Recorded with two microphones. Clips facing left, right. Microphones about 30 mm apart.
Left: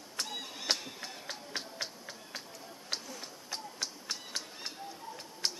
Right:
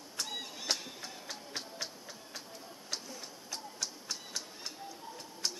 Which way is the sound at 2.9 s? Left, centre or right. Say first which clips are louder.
Left 2 dB; left.